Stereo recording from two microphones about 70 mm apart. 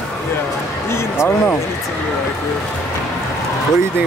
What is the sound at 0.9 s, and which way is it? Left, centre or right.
Speech, left.